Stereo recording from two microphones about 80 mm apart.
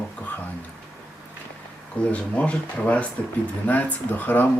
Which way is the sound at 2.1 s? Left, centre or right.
Centre.